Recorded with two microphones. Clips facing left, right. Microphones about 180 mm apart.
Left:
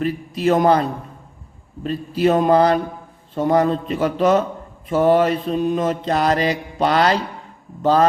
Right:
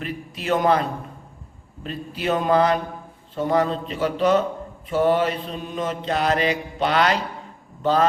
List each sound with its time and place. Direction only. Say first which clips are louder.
0.0 s a man's voice: left 10 dB; 40° left (ahead or behind)
1.8 s a man's voice: left 10 dB; 40° left (ahead or behind)
3.3 s mantra: left 4 dB; 45° left (ahead or behind)
7.8 s speech: left 4 dB; 40° left (ahead or behind)